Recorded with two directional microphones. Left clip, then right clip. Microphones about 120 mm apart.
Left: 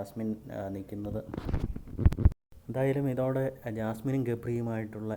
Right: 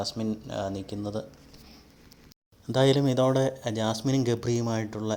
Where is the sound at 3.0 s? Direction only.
50° right (ahead or behind).